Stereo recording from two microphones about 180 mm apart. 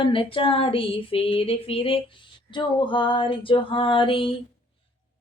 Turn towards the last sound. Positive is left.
turn(degrees=30)  # may be behind; listen again after turning